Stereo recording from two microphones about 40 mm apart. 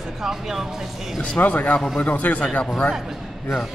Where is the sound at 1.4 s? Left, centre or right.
Left.